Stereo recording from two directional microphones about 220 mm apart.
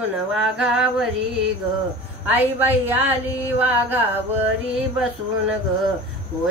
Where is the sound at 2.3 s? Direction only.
10° right (ahead or behind).